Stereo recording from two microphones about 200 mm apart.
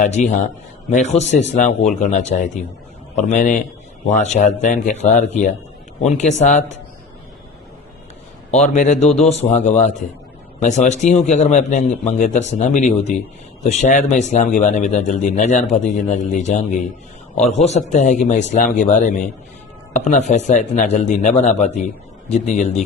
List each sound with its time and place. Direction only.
0.0 s speech: 40° left (ahead or behind)
8.4 s speech: 35° left (ahead or behind)